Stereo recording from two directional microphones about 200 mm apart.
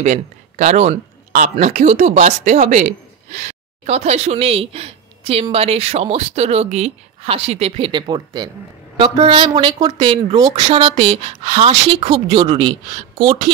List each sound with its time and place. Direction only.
0.0 s speech: 35° right (ahead or behind); by 10.6 s 20° right (ahead or behind)
10.6 s speech: 35° right (ahead or behind)